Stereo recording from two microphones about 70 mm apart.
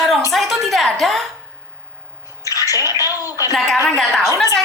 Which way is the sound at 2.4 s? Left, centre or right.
Left.